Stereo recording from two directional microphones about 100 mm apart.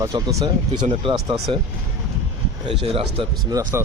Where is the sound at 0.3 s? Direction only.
35° right (ahead or behind).